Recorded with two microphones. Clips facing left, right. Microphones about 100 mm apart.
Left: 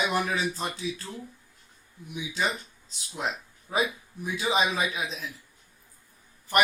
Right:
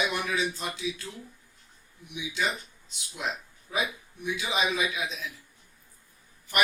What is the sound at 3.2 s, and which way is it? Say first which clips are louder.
Speech: left 2 dB; 35° left (ahead or behind).